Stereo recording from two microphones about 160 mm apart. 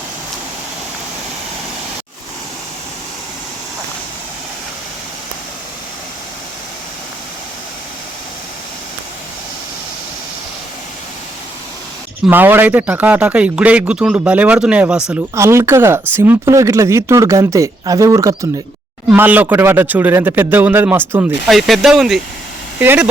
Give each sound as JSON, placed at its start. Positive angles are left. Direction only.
{"t": 12.3, "sound": "speech", "side_deg": -10}
{"t": 21.4, "sound": "speech", "side_deg": 0}
{"t": 22.8, "sound": "speech", "side_deg": -10}